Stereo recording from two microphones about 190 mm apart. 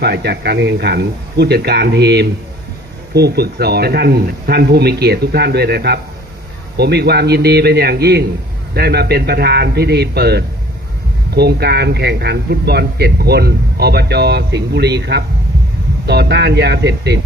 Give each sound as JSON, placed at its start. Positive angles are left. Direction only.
{"t": 0.0, "sound": "speech", "side_deg": -60}